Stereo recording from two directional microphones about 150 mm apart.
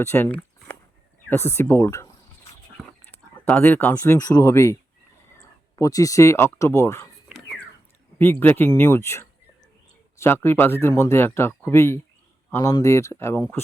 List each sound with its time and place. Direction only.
0.0 s a sound: 15° left (ahead or behind)
1.3 s speech: 15° left (ahead or behind)
8.2 s speech: 15° left (ahead or behind)